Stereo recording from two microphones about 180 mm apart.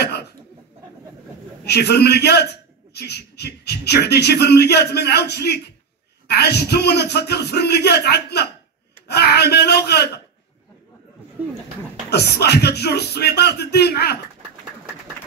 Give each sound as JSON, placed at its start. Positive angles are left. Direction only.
{"t": 1.6, "sound": "a man's voice", "side_deg": 65}
{"t": 12.1, "sound": "a man's voice", "side_deg": 65}